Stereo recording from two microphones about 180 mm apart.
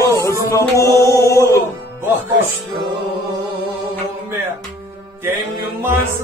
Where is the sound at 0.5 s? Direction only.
15° left (ahead or behind).